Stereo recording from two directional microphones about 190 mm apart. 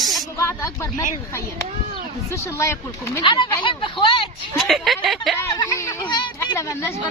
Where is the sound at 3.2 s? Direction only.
25° left (ahead or behind).